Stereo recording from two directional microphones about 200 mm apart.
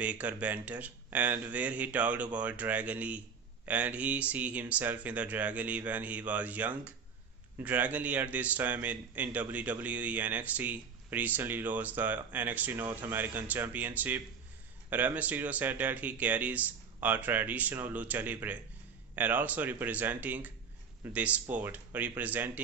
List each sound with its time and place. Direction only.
0.0 s a man's voice: 5° right (ahead or behind)